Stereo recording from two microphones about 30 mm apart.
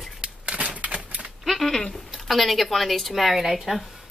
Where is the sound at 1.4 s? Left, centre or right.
Centre.